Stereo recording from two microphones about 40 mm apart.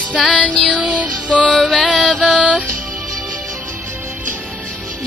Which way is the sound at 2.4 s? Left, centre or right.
Right.